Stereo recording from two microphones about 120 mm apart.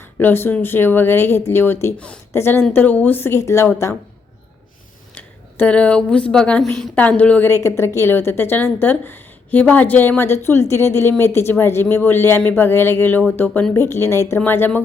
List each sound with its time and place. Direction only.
0.0 s a woman's voice: 15° left (ahead or behind)
5.1 s a woman's voice: 10° left (ahead or behind)